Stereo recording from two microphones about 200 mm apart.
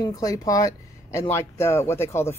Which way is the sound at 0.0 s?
15° left (ahead or behind).